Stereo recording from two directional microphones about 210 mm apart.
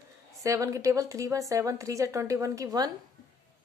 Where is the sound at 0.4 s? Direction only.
15° right (ahead or behind).